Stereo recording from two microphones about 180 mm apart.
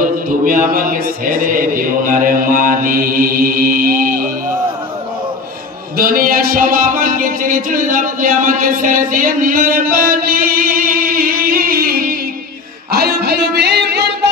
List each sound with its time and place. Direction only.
0.5 s mantra: 50° right (ahead or behind)
5.9 s music: 50° right (ahead or behind); by 14.3 s 70° right (ahead or behind)